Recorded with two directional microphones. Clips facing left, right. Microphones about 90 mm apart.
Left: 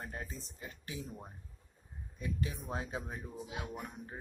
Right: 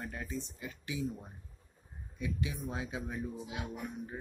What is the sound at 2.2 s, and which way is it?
A man's voice, 40° left (ahead or behind).